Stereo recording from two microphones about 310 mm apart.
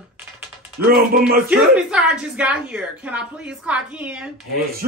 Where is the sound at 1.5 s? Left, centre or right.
Centre.